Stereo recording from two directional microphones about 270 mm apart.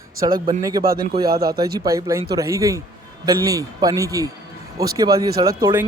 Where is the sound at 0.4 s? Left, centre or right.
Centre.